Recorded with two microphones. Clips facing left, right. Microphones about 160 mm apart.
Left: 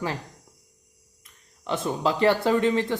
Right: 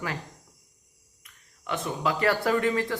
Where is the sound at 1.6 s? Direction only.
30° left (ahead or behind).